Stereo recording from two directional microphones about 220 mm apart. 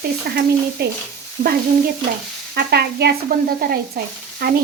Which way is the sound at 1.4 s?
40° right (ahead or behind).